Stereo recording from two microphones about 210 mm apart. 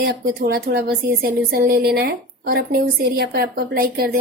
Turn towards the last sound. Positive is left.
turn(degrees=-45)  # may be behind; listen again after turning